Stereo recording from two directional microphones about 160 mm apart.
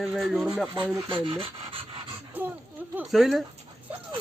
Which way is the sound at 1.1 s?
30° right (ahead or behind).